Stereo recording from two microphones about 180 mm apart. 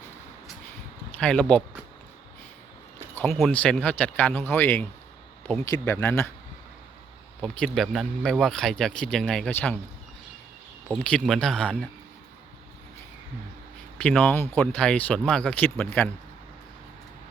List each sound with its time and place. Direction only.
1.2 s speech: 5° left (ahead or behind)
3.3 s speech: 5° left (ahead or behind)
7.4 s speech: centre (ahead or behind)
10.9 s speech: 5° left (ahead or behind)
14.0 s speech: 5° left (ahead or behind)